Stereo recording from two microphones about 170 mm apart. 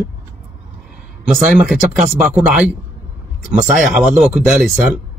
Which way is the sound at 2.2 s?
5° right (ahead or behind).